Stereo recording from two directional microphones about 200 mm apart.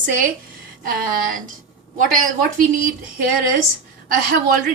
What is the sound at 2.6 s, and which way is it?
Speech, 40° right (ahead or behind).